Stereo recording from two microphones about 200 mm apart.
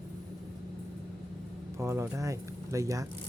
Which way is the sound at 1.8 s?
15° right (ahead or behind).